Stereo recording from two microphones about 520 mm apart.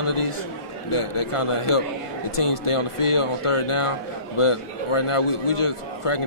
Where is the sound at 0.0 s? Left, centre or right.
Left.